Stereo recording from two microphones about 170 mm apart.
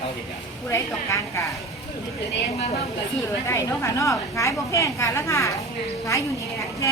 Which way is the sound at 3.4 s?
20° left (ahead or behind).